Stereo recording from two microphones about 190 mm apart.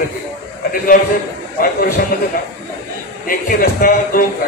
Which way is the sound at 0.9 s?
45° left (ahead or behind).